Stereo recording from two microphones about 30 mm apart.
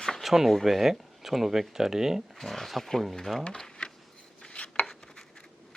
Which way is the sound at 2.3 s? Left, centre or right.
Centre.